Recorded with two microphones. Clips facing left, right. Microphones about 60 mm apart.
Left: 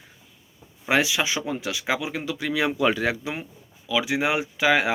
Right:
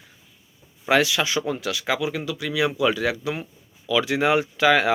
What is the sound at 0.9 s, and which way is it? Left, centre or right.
Speech, centre.